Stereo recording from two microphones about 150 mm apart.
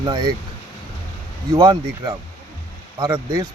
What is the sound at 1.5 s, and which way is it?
Speech, 25° right (ahead or behind).